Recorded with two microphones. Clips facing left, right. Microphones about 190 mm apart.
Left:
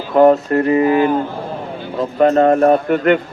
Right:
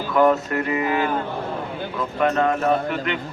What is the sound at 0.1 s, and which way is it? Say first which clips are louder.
Speech: left 7 dB; 35° left (ahead or behind).